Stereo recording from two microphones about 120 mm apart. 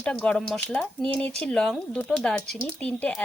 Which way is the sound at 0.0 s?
10° left (ahead or behind).